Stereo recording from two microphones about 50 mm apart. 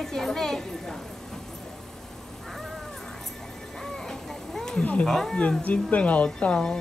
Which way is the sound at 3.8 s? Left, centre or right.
Centre.